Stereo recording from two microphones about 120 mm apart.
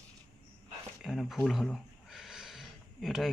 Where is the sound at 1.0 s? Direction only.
Centre (ahead or behind).